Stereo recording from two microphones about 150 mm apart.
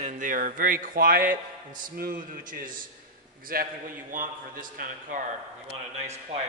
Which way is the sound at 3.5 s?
80° right.